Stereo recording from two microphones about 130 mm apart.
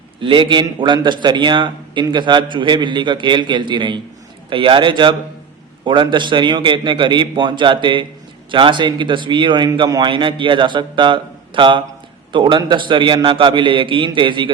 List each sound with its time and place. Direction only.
0.2 s a man's voice: 40° right (ahead or behind)